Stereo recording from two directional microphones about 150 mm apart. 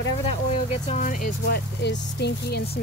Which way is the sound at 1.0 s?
65° left (ahead or behind).